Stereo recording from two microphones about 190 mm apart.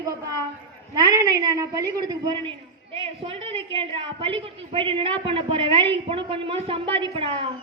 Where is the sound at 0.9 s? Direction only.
20° right (ahead or behind).